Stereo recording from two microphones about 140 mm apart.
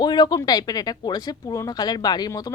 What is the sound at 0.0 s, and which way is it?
Speech, 30° left (ahead or behind).